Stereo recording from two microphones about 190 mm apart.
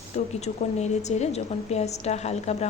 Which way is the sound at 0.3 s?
35° left (ahead or behind).